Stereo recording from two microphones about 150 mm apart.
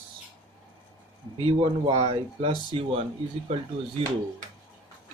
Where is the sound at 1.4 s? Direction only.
40° right (ahead or behind).